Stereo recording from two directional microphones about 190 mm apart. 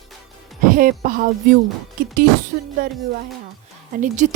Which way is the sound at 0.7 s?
45° right (ahead or behind).